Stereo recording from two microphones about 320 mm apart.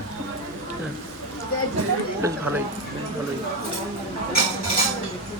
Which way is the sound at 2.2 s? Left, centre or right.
Centre.